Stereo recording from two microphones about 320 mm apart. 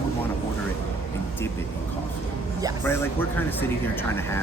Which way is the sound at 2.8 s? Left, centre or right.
Centre.